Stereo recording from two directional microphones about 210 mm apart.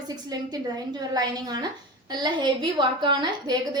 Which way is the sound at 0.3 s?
20° right (ahead or behind).